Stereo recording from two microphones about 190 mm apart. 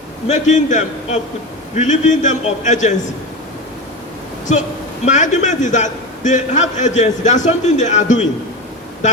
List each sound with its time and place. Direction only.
0.3 s a man's voice: 40° left (ahead or behind)
5.0 s a man's voice: 40° left (ahead or behind)